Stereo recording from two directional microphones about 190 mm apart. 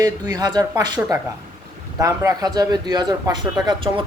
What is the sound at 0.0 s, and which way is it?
A man's voice, 20° right (ahead or behind).